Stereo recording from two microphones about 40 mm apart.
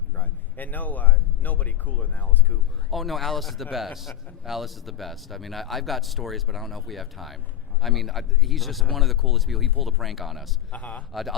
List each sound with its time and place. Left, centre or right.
0.2 s speech: left
2.9 s speech: centre
10.7 s a man's voice: left
11.1 s speech: centre